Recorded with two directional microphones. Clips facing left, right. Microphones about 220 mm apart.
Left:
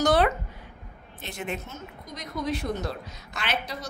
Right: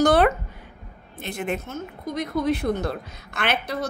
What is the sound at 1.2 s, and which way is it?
A woman's voice, 55° right (ahead or behind).